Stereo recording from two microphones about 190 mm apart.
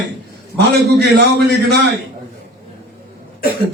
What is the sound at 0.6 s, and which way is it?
A man's voice, 60° right (ahead or behind).